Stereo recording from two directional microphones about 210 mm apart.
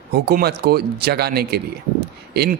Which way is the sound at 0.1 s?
50° right (ahead or behind).